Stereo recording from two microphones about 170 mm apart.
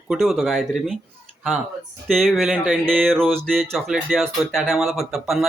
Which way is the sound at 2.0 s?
5° left (ahead or behind).